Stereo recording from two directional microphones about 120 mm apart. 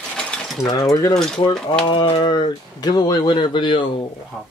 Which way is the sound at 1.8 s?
45° left (ahead or behind).